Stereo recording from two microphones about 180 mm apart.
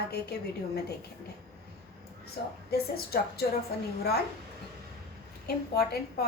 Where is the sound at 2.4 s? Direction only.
60° left (ahead or behind).